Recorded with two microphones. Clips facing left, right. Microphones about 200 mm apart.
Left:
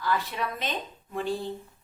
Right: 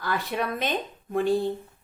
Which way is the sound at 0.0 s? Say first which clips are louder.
Right 1 dB; 55° right (ahead or behind).